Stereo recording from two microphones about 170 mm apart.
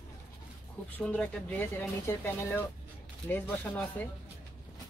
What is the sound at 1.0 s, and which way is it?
Speech, 10° left (ahead or behind).